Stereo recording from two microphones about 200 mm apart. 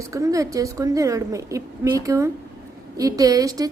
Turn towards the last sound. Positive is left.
turn(degrees=-20)  # may be behind; listen again after turning